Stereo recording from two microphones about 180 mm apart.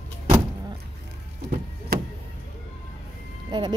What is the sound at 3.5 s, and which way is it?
Speech, 25° right (ahead or behind).